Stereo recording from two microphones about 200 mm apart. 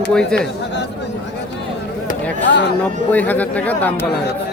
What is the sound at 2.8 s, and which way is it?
Speech, 10° left (ahead or behind).